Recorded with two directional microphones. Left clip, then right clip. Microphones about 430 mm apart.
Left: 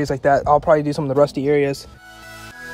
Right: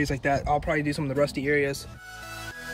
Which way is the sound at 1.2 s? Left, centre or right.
Centre.